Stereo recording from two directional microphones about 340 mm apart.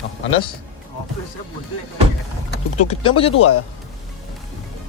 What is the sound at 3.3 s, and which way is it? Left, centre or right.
Speech, left.